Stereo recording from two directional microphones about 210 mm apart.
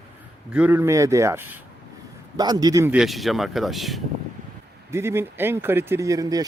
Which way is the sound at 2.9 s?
Centre (ahead or behind).